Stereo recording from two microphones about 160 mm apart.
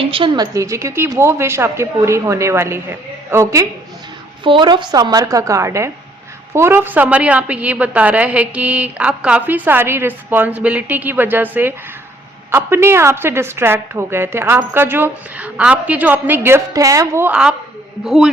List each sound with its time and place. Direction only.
0.1 s a woman's voice: 35° right (ahead or behind)
0.5 s speech: 20° right (ahead or behind)
4.4 s a woman's voice: 30° right (ahead or behind); by 11.4 s 10° right (ahead or behind)
12.5 s a man's voice: 15° right (ahead or behind)